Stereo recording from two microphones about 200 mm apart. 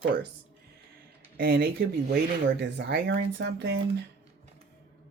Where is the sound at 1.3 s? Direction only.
50° right (ahead or behind).